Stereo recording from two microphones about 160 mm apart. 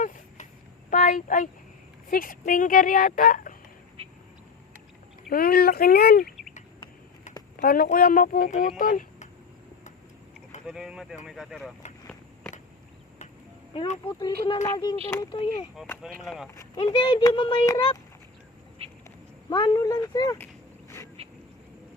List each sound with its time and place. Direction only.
0.0 s a sound: 50° left (ahead or behind)
2.0 s speech: 60° left (ahead or behind)
5.3 s speech: 70° left (ahead or behind)
7.6 s speech: 70° left (ahead or behind)
10.7 s speech: 5° right (ahead or behind)
13.7 s speech: 40° left (ahead or behind)
14.6 s speech: 25° left (ahead or behind)
15.8 s speech: 5° right (ahead or behind)
16.6 s speech: 30° left (ahead or behind)
18.8 s duck: 40° right (ahead or behind)
19.5 s speech: 30° left (ahead or behind)
21.2 s a sound: 40° right (ahead or behind)